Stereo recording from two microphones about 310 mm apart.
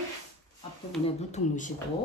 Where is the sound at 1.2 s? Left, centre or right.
Left.